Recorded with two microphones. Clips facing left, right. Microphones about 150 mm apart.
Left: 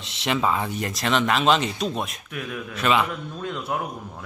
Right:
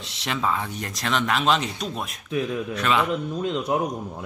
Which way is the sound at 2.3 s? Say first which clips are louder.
Right 8 dB; 25° right (ahead or behind).